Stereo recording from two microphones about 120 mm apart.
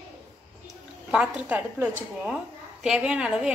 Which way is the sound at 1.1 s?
5° right (ahead or behind).